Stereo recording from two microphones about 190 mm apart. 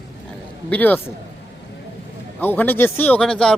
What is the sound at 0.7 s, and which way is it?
Speech, 10° left (ahead or behind).